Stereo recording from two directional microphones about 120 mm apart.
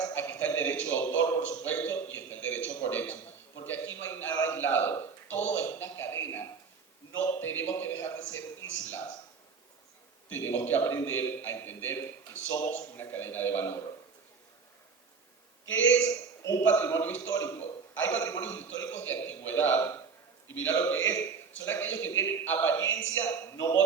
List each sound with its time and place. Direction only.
0.0 s a sound: 20° left (ahead or behind)
10.3 s a man's voice: 15° left (ahead or behind)
16.6 s a man's voice: 20° left (ahead or behind)